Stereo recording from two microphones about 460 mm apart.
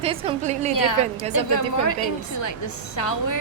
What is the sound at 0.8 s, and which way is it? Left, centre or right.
A woman's voice, left.